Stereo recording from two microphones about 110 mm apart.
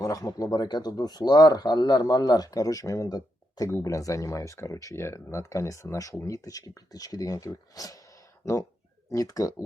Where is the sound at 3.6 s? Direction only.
25° left (ahead or behind).